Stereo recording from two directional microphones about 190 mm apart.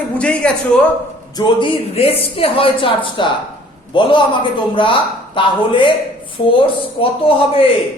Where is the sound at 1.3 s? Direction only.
25° left (ahead or behind).